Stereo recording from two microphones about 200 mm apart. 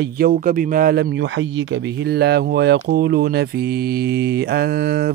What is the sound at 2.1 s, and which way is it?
Speech, 55° right (ahead or behind).